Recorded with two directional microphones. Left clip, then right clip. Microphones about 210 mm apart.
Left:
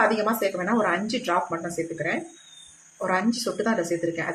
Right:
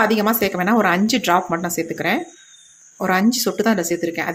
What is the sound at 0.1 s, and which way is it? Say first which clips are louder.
Speech: right 5 dB; 50° right (ahead or behind).